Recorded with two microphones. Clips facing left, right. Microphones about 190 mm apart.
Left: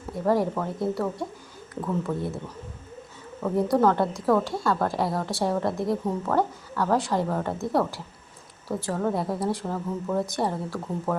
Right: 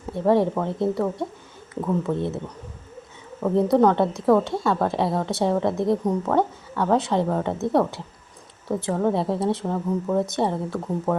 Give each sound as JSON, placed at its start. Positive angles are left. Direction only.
{"t": 0.1, "sound": "a woman's voice", "side_deg": -25}
{"t": 3.4, "sound": "a woman's voice", "side_deg": -20}